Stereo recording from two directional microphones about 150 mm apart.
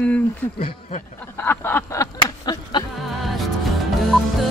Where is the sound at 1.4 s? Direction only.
15° left (ahead or behind).